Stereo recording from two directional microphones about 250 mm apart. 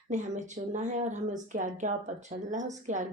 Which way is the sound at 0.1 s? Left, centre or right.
Right.